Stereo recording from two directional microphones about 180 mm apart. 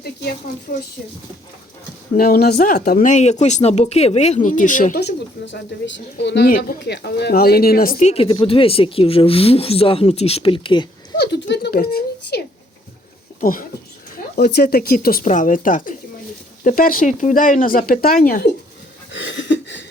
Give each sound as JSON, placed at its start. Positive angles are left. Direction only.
{"t": 0.0, "sound": "speech", "side_deg": 60}
{"t": 2.1, "sound": "speech", "side_deg": 55}
{"t": 4.9, "sound": "a woman's voice", "side_deg": 65}
{"t": 11.2, "sound": "a sound", "side_deg": 70}
{"t": 13.4, "sound": "speech", "side_deg": 50}
{"t": 14.3, "sound": "speech", "side_deg": 60}
{"t": 19.1, "sound": "a sound", "side_deg": 90}